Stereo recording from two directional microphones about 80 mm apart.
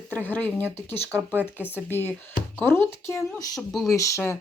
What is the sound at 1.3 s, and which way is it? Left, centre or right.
Speech, right.